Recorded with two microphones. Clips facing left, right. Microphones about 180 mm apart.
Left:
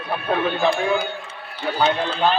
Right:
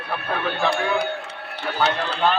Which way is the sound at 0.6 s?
65° right (ahead or behind).